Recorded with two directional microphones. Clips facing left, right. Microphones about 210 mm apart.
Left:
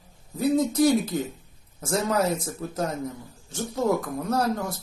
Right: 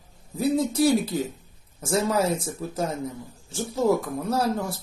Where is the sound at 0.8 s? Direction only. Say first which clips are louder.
Right 1 dB; 10° right (ahead or behind).